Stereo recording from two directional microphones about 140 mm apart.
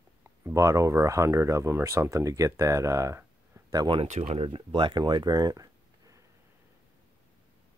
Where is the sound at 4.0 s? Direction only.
50° right (ahead or behind); by 6.2 s 25° right (ahead or behind).